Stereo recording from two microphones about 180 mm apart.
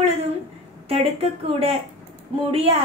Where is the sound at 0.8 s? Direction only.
30° right (ahead or behind).